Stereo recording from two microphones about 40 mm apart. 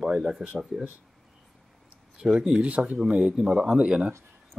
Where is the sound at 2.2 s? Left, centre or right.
Centre.